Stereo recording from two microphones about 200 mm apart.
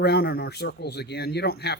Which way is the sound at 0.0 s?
55° left (ahead or behind).